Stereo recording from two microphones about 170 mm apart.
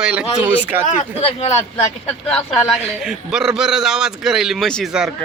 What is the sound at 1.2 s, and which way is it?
Speech, 40° left (ahead or behind).